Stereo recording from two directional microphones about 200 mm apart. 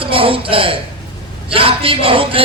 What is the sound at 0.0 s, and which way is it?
A man's voice, 25° right (ahead or behind).